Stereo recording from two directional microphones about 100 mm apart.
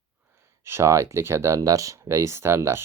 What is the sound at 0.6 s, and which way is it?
Speech, 25° right (ahead or behind).